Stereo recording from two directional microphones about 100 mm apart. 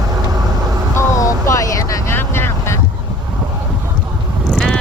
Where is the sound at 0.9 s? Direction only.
35° left (ahead or behind).